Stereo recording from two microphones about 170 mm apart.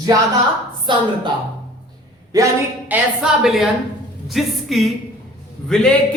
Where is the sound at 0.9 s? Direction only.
30° right (ahead or behind).